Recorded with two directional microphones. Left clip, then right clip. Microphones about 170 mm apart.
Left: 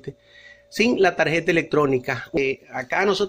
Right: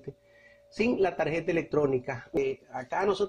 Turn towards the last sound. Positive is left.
turn(degrees=20)  # may be behind; listen again after turning